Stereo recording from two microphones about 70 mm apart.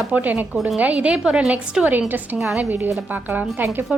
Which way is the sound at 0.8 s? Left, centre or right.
Centre.